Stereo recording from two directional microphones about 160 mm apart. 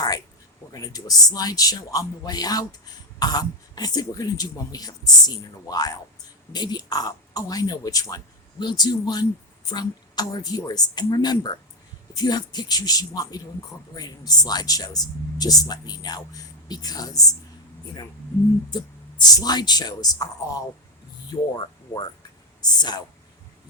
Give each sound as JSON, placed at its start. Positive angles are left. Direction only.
{"t": 0.7, "sound": "speech", "side_deg": 25}
{"t": 18.7, "sound": "speech", "side_deg": 25}